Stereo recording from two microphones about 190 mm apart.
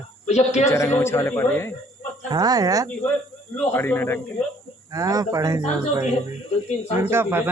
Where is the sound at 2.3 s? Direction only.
20° right (ahead or behind).